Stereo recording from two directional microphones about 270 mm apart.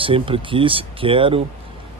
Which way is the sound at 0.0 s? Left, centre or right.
Centre.